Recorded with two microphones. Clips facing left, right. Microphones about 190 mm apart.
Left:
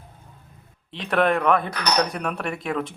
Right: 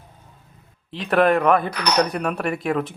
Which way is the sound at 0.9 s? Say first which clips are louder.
Right 3 dB; centre (ahead or behind).